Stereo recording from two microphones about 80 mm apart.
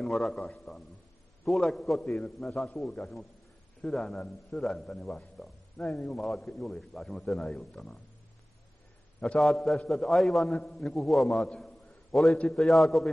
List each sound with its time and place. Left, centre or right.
0.0 s a man's voice: centre
9.2 s a man's voice: centre